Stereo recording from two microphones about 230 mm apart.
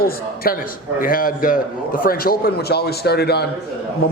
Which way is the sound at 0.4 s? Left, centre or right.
Left.